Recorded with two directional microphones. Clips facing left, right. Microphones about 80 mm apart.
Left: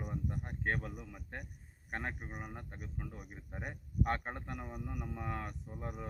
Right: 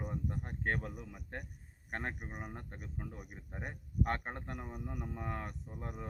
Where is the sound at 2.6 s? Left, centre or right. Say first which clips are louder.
Even; centre.